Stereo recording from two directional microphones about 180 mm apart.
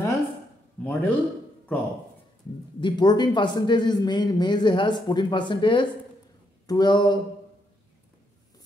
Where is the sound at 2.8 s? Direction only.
25° left (ahead or behind).